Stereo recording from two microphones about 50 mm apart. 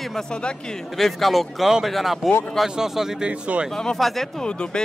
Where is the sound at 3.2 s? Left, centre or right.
Right.